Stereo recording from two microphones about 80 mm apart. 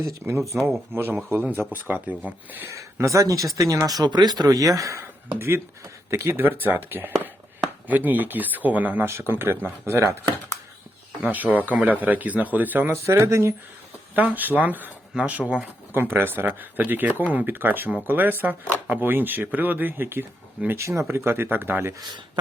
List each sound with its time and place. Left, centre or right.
0.0 s speech: right
2.6 s speech: right
4.0 s speech: right
5.3 s speech: right
11.2 s speech: right
14.2 s speech: right